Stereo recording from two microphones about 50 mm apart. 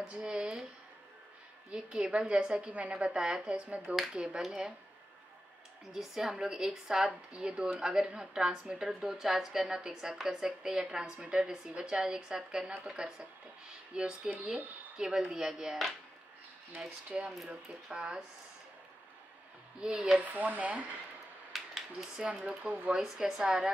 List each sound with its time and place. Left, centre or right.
0.0 s a woman's voice: centre
0.4 s a woman's voice: centre
1.7 s a woman's voice: centre
5.9 s a woman's voice: centre
16.8 s a woman's voice: centre
19.8 s a woman's voice: centre
20.2 s speech: right
21.5 s a sound: centre
22.2 s a woman's voice: centre